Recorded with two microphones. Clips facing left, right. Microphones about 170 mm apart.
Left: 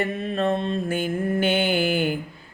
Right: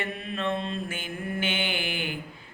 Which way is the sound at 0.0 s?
40° left (ahead or behind).